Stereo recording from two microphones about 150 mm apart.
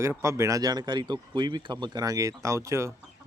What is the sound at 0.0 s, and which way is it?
Speech, 20° right (ahead or behind).